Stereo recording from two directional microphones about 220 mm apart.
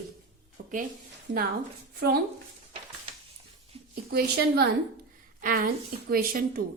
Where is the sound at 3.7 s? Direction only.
25° right (ahead or behind).